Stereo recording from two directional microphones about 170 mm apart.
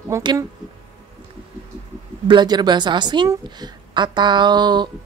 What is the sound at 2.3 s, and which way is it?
A woman's voice, 25° right (ahead or behind).